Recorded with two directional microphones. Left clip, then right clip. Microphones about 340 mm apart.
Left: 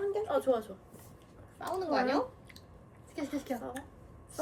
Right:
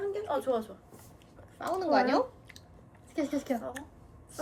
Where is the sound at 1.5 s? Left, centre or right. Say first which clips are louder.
Right 5 dB; right.